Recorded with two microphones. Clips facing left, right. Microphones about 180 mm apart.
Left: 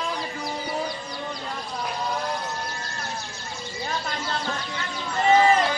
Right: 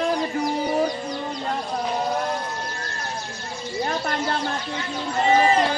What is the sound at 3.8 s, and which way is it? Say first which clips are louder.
Speech: right 4 dB; 55° right (ahead or behind).